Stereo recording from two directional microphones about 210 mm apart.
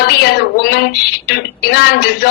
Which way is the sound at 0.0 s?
50° left (ahead or behind).